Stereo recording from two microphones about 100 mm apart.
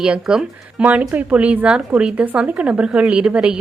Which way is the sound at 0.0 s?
5° right (ahead or behind).